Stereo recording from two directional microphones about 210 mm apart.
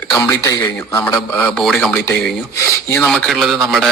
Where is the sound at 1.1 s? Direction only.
5° left (ahead or behind).